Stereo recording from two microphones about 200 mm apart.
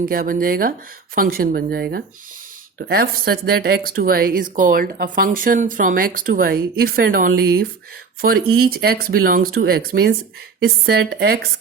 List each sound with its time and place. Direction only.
0.0 s a woman's voice: 45° right (ahead or behind)